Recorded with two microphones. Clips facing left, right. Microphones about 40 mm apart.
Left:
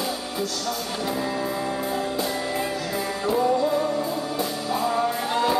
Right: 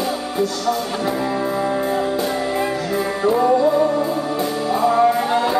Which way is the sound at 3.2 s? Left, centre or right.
Right.